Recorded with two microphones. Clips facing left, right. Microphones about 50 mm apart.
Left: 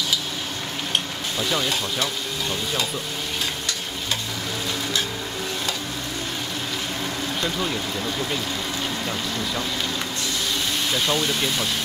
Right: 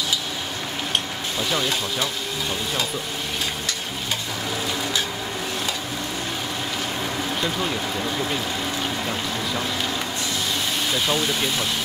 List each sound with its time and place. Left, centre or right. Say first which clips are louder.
7.4 s speech: left 1 dB; centre
11.1 s speech: even; centre